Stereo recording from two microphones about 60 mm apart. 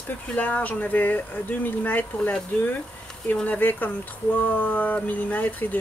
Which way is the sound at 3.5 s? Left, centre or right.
Left.